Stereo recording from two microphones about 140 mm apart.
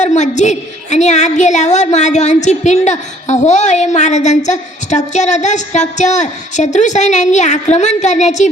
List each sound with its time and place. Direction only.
0.0 s a woman's voice: 55° left (ahead or behind)